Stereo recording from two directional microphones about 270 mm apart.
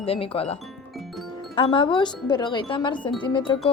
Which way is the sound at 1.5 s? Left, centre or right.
Centre.